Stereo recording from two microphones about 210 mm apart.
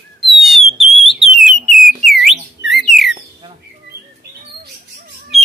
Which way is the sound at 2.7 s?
Centre (ahead or behind).